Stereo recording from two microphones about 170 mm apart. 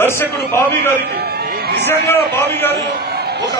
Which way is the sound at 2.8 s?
70° right (ahead or behind).